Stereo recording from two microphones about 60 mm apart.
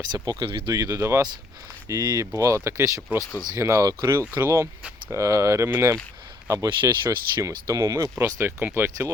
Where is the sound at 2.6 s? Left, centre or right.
Right.